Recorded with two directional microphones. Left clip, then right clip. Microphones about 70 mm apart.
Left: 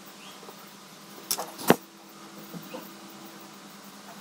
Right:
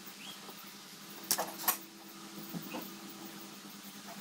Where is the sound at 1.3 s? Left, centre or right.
Left.